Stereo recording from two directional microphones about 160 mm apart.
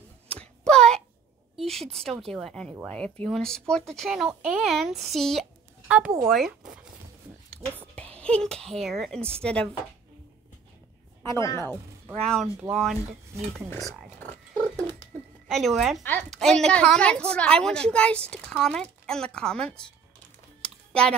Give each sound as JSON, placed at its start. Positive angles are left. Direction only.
{"t": 0.3, "sound": "a sound", "side_deg": 5}
{"t": 1.6, "sound": "a woman's voice", "side_deg": 0}
{"t": 8.2, "sound": "a woman's voice", "side_deg": 5}
{"t": 11.2, "sound": "a woman's voice", "side_deg": 20}
{"t": 12.2, "sound": "a woman's voice", "side_deg": 5}
{"t": 13.8, "sound": "a sound", "side_deg": 5}
{"t": 15.4, "sound": "speech", "side_deg": 0}
{"t": 16.0, "sound": "a woman's voice", "side_deg": 10}
{"t": 20.6, "sound": "typing", "side_deg": 5}